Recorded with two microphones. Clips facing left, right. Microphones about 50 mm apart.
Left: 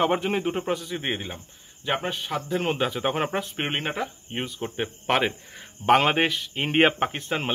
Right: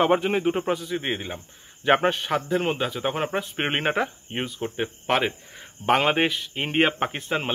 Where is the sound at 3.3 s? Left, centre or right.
Centre.